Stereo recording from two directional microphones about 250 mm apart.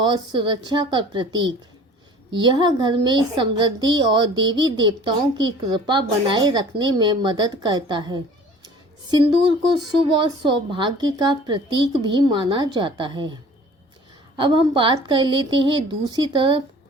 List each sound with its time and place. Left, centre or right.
0.0 s a woman's voice: centre